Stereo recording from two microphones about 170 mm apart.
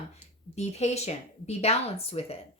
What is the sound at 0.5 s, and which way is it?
A woman's voice, 40° left (ahead or behind).